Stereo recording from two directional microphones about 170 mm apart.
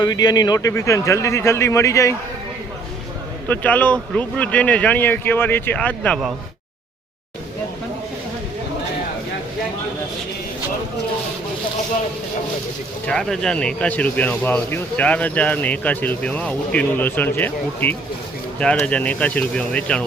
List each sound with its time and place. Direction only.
0.0 s speech: 25° left (ahead or behind)
3.5 s speech: 10° left (ahead or behind)
13.1 s speech: 5° left (ahead or behind)